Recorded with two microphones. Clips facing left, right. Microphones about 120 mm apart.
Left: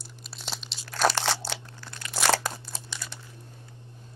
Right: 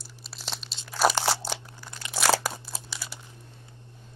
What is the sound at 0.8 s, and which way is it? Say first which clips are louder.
Crunch: right 1 dB; 5° right (ahead or behind).